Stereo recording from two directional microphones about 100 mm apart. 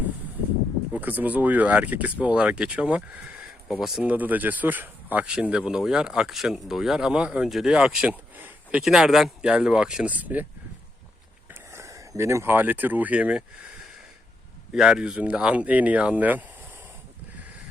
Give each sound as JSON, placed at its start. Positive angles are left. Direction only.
{"t": 0.9, "sound": "speech", "side_deg": -15}
{"t": 4.1, "sound": "speech", "side_deg": -15}
{"t": 8.8, "sound": "speech", "side_deg": -5}
{"t": 11.7, "sound": "speech", "side_deg": -30}